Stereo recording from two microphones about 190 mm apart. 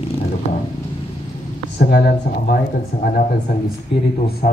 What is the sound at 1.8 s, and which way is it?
A man's voice, 55° left (ahead or behind).